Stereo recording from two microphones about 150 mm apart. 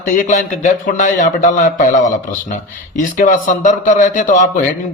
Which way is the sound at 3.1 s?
60° left (ahead or behind).